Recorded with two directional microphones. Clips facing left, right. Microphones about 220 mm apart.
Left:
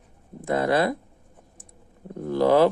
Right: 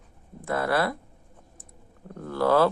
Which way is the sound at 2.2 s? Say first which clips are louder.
Left 3 dB; 15° left (ahead or behind).